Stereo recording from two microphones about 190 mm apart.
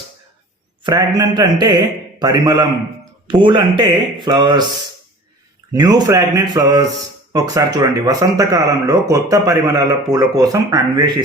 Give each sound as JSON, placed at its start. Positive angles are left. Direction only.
{"t": 0.9, "sound": "speech", "side_deg": -20}
{"t": 5.7, "sound": "speech", "side_deg": -20}